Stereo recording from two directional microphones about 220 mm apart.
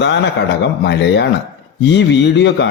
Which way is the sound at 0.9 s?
50° left (ahead or behind).